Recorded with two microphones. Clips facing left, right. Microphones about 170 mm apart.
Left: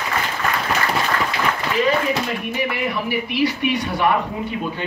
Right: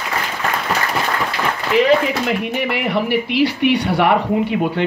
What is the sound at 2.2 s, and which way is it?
Speech, 70° right (ahead or behind).